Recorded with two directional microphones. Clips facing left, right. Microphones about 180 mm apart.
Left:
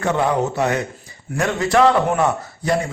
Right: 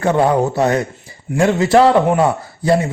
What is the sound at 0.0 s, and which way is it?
A man's voice, 35° right (ahead or behind).